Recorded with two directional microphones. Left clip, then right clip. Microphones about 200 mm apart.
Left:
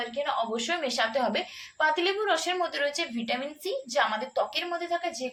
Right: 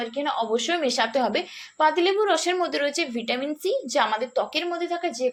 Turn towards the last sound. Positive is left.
turn(degrees=-40)  # may be behind; listen again after turning